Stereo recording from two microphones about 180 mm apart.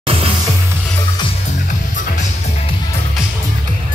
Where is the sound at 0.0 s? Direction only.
30° right (ahead or behind).